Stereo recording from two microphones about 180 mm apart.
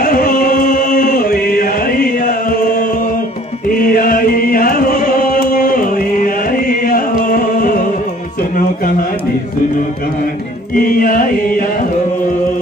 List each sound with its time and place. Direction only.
0.0 s singing: 50° left (ahead or behind)
0.9 s chant: 60° left (ahead or behind)
8.4 s music: 50° left (ahead or behind)
10.7 s chant: 50° left (ahead or behind)